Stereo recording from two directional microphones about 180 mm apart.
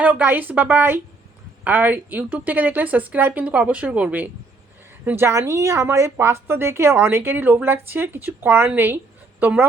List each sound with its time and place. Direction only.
0.0 s a woman's voice: 10° right (ahead or behind)